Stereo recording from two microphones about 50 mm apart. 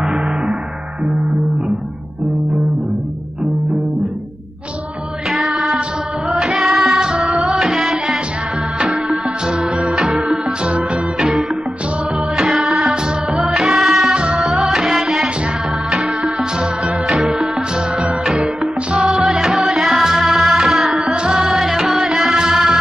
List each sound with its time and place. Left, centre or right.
0.0 s gong: centre
5.3 s music: centre
12.4 s music: centre
14.1 s music: right
14.4 s music: centre